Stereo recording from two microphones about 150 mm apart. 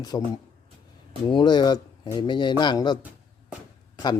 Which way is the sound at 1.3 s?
30° left (ahead or behind).